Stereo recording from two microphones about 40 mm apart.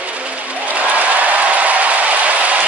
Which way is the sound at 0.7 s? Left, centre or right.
Right.